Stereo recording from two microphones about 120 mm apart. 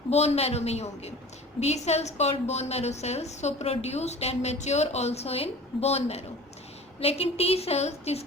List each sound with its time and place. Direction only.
0.1 s a woman's voice: 60° left (ahead or behind)